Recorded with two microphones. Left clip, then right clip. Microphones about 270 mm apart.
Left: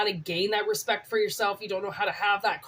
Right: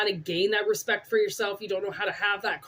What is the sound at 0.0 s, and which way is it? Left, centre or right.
Speech, centre.